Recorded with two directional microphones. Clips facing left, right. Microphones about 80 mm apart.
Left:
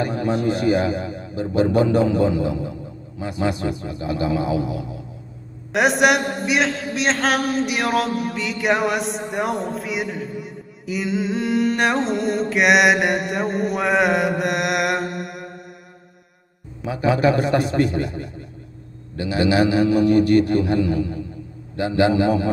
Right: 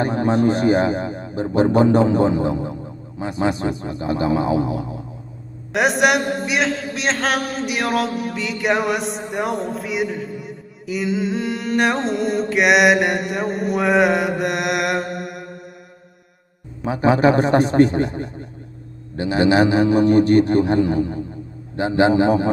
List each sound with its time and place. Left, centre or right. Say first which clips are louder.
0.0 s a man's voice: right 4 dB; right
5.7 s a man's voice: even; centre
16.8 s a man's voice: right 3 dB; right